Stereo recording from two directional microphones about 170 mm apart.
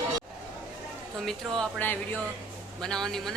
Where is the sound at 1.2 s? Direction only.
Centre (ahead or behind).